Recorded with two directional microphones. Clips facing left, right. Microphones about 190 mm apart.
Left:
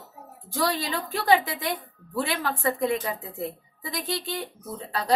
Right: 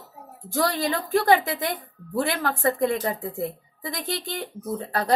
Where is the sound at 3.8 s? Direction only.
50° right (ahead or behind).